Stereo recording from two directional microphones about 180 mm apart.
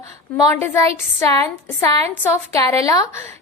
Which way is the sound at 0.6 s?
15° left (ahead or behind).